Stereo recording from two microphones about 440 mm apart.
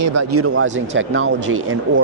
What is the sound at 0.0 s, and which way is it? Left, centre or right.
Speech, right.